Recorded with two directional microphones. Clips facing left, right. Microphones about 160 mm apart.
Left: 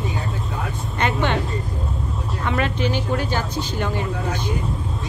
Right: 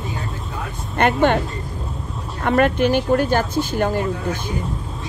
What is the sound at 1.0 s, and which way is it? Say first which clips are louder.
Speech: right 6 dB; 50° right (ahead or behind).